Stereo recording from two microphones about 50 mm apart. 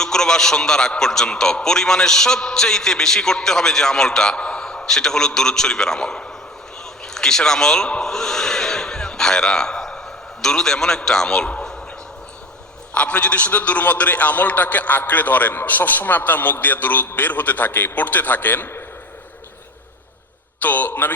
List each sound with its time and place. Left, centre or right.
0.0 s a man's voice: centre
8.1 s a sound: centre
10.4 s a man's voice: centre
12.9 s a man's voice: left
20.6 s a man's voice: left